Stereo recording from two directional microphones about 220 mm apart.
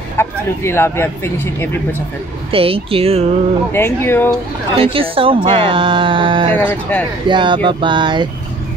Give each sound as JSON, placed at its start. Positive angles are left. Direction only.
{"t": 0.2, "sound": "speech", "side_deg": 10}
{"t": 2.5, "sound": "speech", "side_deg": -25}
{"t": 3.7, "sound": "speech", "side_deg": 10}
{"t": 4.7, "sound": "speech", "side_deg": -25}
{"t": 6.5, "sound": "speech", "side_deg": 10}
{"t": 7.2, "sound": "speech", "side_deg": -20}